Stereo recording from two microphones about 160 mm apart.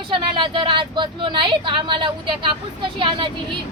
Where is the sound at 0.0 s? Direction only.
30° right (ahead or behind).